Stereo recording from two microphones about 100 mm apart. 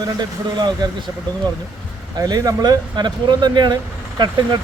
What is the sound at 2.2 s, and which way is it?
Speech, 35° right (ahead or behind).